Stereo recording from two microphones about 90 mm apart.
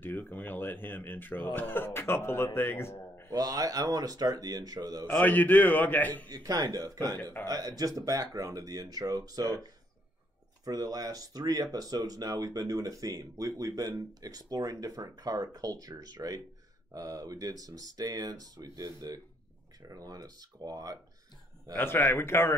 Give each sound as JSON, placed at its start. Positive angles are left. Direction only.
{"t": 0.0, "sound": "a man's voice", "side_deg": 20}
{"t": 3.3, "sound": "speech", "side_deg": -40}
{"t": 5.0, "sound": "a man's voice", "side_deg": 20}
{"t": 6.3, "sound": "speech", "side_deg": -40}
{"t": 21.7, "sound": "a man's voice", "side_deg": 25}